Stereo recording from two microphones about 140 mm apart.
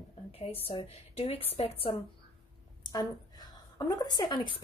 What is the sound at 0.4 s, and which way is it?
A woman's voice, 45° left (ahead or behind).